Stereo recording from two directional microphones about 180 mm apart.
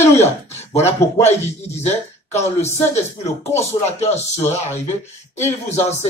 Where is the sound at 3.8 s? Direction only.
40° left (ahead or behind).